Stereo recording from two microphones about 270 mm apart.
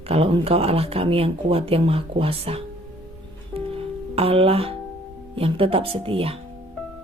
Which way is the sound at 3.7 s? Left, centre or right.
Right.